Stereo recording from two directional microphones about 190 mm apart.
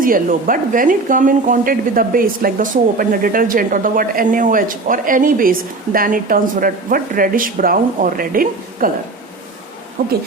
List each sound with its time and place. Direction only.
0.0 s speech: 45° right (ahead or behind)
10.0 s speech: 50° right (ahead or behind)